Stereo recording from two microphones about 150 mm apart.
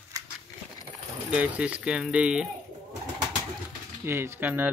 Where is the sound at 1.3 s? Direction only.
10° right (ahead or behind).